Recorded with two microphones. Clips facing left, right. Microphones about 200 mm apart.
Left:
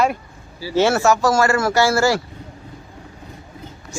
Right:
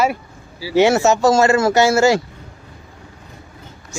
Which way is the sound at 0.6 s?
15° right (ahead or behind).